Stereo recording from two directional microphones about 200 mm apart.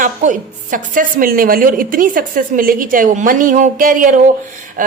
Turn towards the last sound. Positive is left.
turn(degrees=-40)  # may be behind; listen again after turning